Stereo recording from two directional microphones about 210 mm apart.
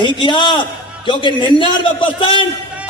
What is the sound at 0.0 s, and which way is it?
A man's voice, 20° left (ahead or behind).